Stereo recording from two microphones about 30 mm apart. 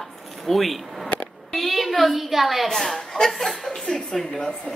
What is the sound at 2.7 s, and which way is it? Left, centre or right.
A woman's voice, centre.